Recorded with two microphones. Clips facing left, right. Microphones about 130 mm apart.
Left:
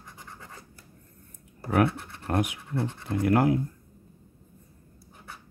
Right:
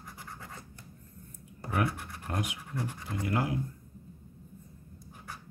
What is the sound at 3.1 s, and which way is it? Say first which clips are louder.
Speech: left 9 dB; 60° left (ahead or behind).